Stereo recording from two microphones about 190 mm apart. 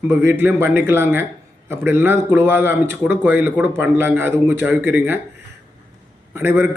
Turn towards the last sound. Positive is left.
turn(degrees=-10)  # may be behind; listen again after turning